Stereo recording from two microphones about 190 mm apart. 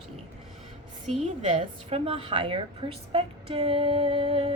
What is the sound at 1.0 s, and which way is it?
A woman's voice, 35° right (ahead or behind).